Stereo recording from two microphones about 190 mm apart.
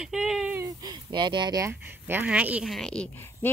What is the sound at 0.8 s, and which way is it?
Speech, 25° right (ahead or behind).